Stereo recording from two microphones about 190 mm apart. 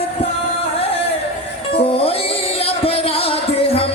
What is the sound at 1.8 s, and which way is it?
Music, 30° left (ahead or behind).